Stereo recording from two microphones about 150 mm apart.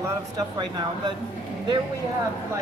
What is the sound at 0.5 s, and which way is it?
Speech, 30° right (ahead or behind).